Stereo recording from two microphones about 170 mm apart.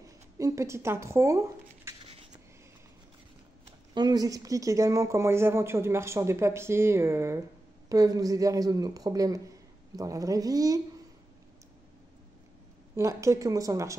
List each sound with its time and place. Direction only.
0.0 s speech: 20° right (ahead or behind)
2.0 s a sound: 40° right (ahead or behind)
3.9 s a man's voice: 25° right (ahead or behind)
12.9 s speech: 15° right (ahead or behind)